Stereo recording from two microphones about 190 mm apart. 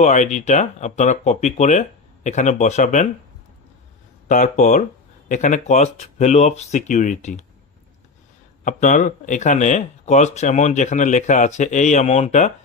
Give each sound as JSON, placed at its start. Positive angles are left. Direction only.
{"t": 0.0, "sound": "speech", "side_deg": 40}
{"t": 4.3, "sound": "speech", "side_deg": 40}
{"t": 8.6, "sound": "speech", "side_deg": 40}